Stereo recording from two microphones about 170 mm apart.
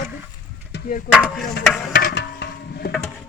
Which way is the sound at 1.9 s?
60° left (ahead or behind).